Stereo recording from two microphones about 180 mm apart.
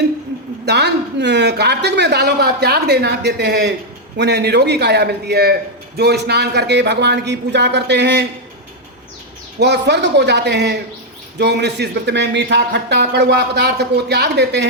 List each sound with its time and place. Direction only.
0.6 s a man's voice: 70° right (ahead or behind)
9.6 s a man's voice: 70° right (ahead or behind)